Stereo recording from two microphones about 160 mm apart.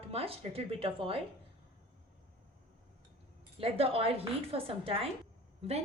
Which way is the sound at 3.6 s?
35° right (ahead or behind).